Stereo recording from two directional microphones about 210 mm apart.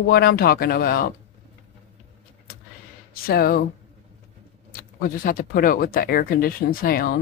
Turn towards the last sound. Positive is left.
turn(degrees=45)  # may be behind; listen again after turning